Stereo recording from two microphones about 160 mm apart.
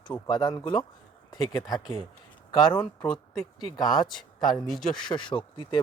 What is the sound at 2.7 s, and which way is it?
Speech, 5° left (ahead or behind).